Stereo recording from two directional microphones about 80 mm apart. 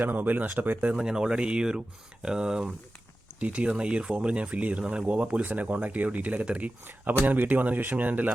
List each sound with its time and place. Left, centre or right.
0.0 s speech: right
0.9 s speech: centre